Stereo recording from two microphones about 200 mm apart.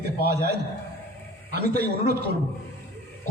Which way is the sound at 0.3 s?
55° right (ahead or behind).